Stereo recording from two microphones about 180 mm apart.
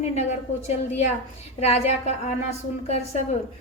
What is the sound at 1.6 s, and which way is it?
Speech, 35° left (ahead or behind).